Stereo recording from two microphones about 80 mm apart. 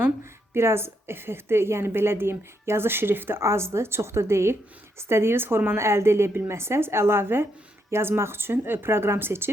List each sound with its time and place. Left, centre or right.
0.5 s a woman's voice: right